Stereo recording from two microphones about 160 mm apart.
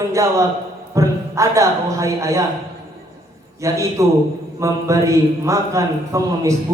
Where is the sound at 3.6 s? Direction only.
20° right (ahead or behind).